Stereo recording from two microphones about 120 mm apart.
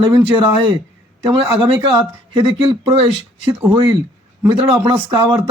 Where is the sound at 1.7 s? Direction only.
40° right (ahead or behind).